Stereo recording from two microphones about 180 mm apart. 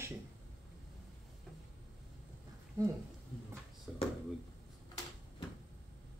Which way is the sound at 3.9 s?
5° right (ahead or behind).